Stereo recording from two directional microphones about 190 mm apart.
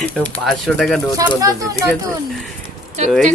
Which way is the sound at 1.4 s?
20° right (ahead or behind).